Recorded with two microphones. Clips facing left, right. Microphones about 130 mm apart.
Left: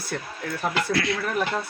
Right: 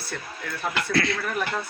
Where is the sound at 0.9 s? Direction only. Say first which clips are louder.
Even; 10° left (ahead or behind).